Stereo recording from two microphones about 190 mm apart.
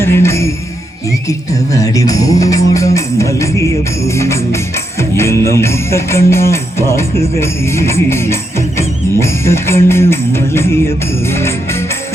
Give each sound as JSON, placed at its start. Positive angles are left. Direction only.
{"t": 0.0, "sound": "music", "side_deg": 15}
{"t": 1.3, "sound": "speech", "side_deg": 15}
{"t": 4.0, "sound": "music", "side_deg": 15}
{"t": 5.5, "sound": "speech", "side_deg": 15}
{"t": 11.3, "sound": "music", "side_deg": 15}